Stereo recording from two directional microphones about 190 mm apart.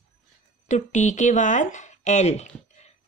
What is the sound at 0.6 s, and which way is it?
Speech, 40° left (ahead or behind).